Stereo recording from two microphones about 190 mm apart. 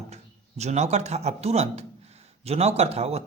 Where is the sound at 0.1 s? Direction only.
35° right (ahead or behind).